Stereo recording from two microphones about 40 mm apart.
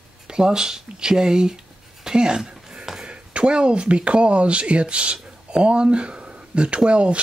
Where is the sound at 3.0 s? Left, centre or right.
Right.